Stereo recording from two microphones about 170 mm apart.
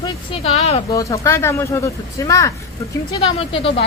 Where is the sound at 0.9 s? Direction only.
20° left (ahead or behind).